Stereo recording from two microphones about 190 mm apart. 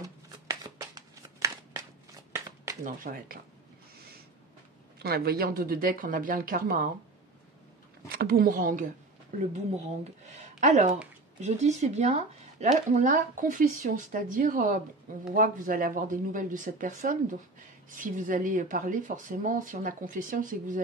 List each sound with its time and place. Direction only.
0.3 s a sound: 20° right (ahead or behind)
2.8 s speech: 45° right (ahead or behind)
4.9 s speech: 55° right (ahead or behind)
8.1 s speech: 50° right (ahead or behind)